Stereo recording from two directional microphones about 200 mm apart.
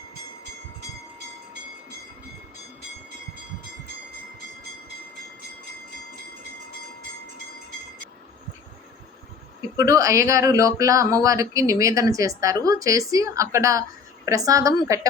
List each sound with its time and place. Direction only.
9.7 s speech: 15° right (ahead or behind)